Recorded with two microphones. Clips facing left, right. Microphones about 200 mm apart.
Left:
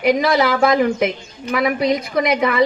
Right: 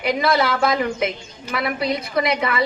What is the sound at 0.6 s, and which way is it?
A man's voice, 50° left (ahead or behind).